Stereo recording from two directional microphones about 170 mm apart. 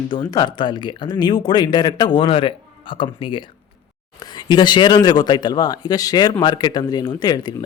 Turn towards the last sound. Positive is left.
turn(degrees=25)  # may be behind; listen again after turning